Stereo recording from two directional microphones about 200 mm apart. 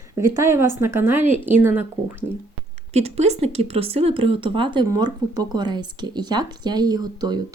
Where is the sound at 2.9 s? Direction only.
30° right (ahead or behind).